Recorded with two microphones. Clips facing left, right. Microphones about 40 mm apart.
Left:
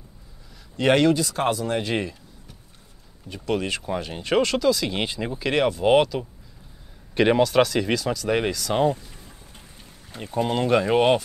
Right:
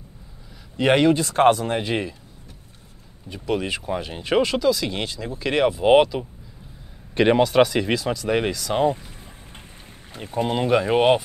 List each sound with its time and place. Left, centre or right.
0.7 s speech: centre
1.1 s speech: right
1.7 s speech: centre
3.3 s speech: centre
5.0 s speech: centre
5.4 s speech: centre
8.9 s vehicle: right
10.1 s speech: centre